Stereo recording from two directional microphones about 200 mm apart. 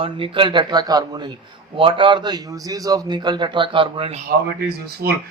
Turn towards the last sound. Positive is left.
turn(degrees=-55)  # may be behind; listen again after turning